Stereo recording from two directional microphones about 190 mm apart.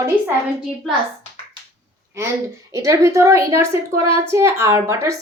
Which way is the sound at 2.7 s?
15° right (ahead or behind).